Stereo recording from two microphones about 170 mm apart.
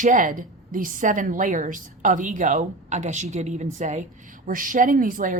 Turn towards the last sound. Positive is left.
turn(degrees=-55)  # may be behind; listen again after turning